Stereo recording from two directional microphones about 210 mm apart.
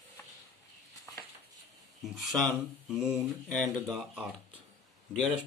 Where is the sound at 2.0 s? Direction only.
Centre (ahead or behind).